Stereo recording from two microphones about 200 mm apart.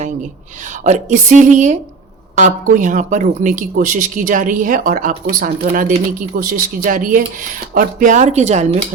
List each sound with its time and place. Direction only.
0.9 s speech: 40° right (ahead or behind)